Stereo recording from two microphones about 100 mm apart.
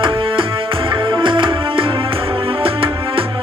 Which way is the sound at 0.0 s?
60° right (ahead or behind).